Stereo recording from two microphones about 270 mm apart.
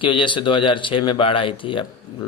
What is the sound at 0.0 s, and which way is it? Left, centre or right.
A man's voice, centre.